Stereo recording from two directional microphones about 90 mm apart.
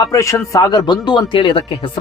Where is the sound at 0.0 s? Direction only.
40° left (ahead or behind); by 1.9 s 60° left (ahead or behind).